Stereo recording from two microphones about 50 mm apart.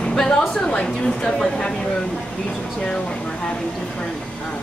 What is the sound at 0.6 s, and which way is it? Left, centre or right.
Speech, centre.